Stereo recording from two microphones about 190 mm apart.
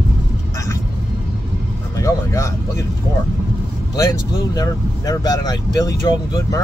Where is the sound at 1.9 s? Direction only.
15° left (ahead or behind).